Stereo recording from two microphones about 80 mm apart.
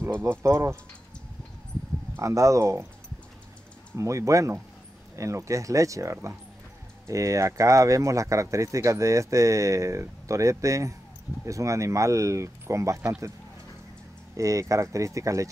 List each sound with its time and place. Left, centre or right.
0.0 s speech: right
2.2 s speech: right
3.9 s speech: right
14.3 s speech: right